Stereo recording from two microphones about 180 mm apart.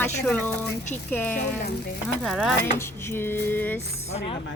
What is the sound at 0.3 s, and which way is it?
Dishes, 10° left (ahead or behind).